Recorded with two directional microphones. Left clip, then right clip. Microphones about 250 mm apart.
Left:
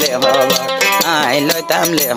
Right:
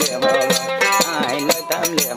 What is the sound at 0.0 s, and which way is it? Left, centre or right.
Music, left.